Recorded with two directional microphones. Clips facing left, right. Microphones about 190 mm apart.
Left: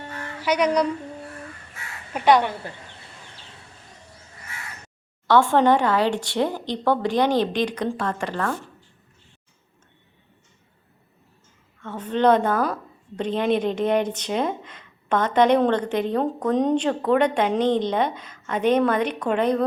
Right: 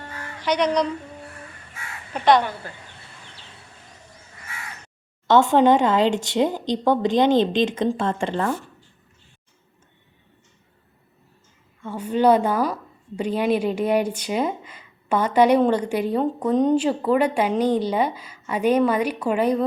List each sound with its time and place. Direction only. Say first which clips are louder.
0.3 s speech: even; 10° left (ahead or behind)
2.1 s speech: even; 10° left (ahead or behind)
5.3 s a woman's voice: right 2 dB; 20° right (ahead or behind)
11.8 s a woman's voice: right 1 dB; 10° right (ahead or behind)